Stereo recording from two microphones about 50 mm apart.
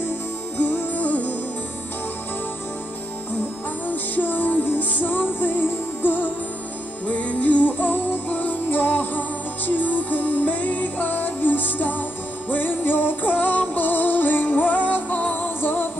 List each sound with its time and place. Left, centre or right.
0.6 s music: left
3.8 s music: left
7.1 s music: left